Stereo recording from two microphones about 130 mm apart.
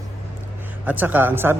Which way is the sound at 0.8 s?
15° right (ahead or behind).